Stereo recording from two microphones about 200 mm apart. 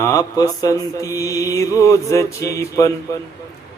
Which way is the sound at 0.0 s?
15° left (ahead or behind).